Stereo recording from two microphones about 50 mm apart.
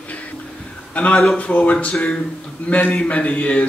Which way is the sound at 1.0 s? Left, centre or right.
Left.